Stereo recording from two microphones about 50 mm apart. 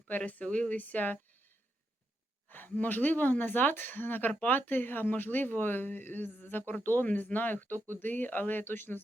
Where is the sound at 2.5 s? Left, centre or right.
Left.